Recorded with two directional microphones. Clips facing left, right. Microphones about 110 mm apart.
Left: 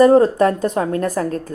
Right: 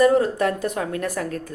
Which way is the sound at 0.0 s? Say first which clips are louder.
Left 6 dB; 35° left (ahead or behind).